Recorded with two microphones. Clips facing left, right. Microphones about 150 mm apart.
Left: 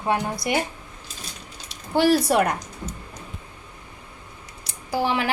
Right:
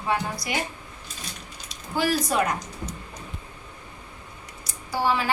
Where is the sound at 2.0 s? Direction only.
70° left (ahead or behind).